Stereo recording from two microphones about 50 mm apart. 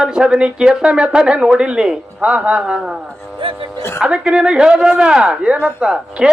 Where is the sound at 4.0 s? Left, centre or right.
Centre.